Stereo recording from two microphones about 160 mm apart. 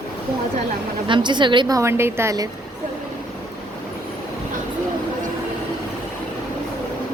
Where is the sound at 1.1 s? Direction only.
30° right (ahead or behind).